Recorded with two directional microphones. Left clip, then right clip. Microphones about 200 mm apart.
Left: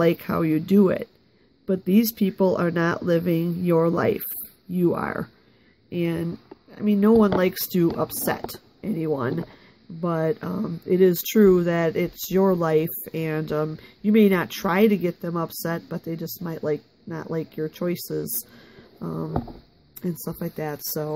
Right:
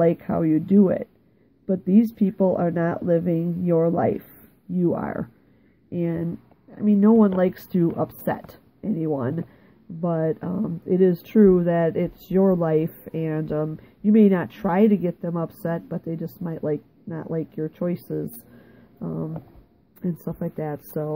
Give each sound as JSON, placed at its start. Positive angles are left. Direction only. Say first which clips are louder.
{"t": 0.0, "sound": "speech", "louder": "right 1 dB", "side_deg": 20}
{"t": 18.9, "sound": "dog", "louder": "even", "side_deg": 15}
{"t": 20.0, "sound": "speech", "louder": "right 1 dB", "side_deg": 10}